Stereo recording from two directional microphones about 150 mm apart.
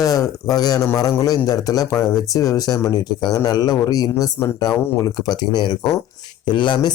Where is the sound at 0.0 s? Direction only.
20° left (ahead or behind).